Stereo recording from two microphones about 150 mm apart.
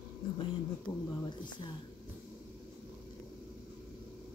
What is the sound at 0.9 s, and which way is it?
Speech, 30° left (ahead or behind).